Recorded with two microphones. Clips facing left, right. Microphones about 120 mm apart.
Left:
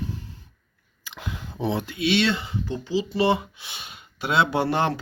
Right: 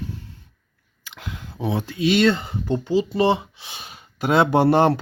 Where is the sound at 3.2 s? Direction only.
35° right (ahead or behind).